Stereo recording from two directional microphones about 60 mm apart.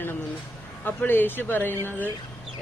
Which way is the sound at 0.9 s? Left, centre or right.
Left.